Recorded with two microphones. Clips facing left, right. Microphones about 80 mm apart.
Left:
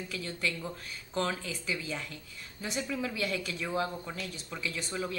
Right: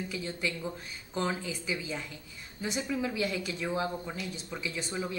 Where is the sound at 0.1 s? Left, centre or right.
Centre.